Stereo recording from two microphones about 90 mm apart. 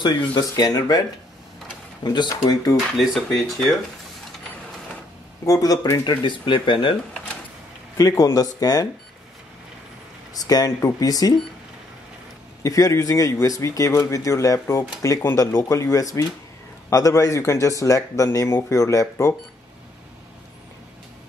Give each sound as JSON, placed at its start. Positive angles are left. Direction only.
{"t": 0.4, "sound": "speech", "side_deg": 50}
{"t": 2.0, "sound": "speech", "side_deg": 55}
{"t": 3.0, "sound": "speech", "side_deg": 0}
{"t": 5.4, "sound": "speech", "side_deg": 40}
{"t": 6.2, "sound": "speech", "side_deg": 65}
{"t": 8.0, "sound": "speech", "side_deg": 35}
{"t": 10.3, "sound": "speech", "side_deg": 45}
{"t": 12.6, "sound": "speech", "side_deg": 35}